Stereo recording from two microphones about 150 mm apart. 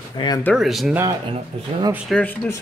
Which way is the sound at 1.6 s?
30° right (ahead or behind).